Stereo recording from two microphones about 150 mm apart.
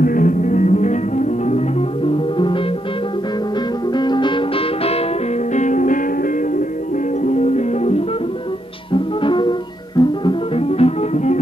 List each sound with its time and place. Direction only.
0.0 s music: 65° left (ahead or behind); by 1.9 s 50° left (ahead or behind)
2.3 s music: 35° left (ahead or behind)
3.9 s music: 30° left (ahead or behind)
5.5 s music: 55° left (ahead or behind)
7.2 s music: 50° left (ahead or behind)
8.9 s music: 35° left (ahead or behind)